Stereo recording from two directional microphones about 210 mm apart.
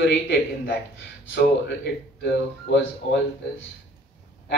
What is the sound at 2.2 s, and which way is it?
Speech, 60° left (ahead or behind).